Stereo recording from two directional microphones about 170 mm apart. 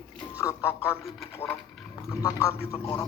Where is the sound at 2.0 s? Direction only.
20° left (ahead or behind).